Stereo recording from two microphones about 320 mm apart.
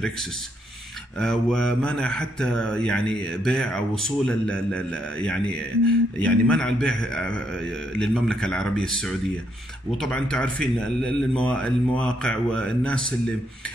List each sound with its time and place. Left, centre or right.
1.2 s a man's voice: centre